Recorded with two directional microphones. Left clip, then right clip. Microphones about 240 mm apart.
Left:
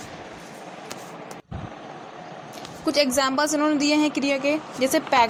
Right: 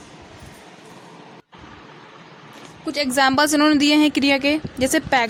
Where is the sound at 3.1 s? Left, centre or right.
Right.